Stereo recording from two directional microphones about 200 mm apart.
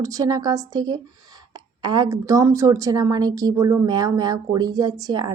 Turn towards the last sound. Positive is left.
turn(degrees=-20)  # may be behind; listen again after turning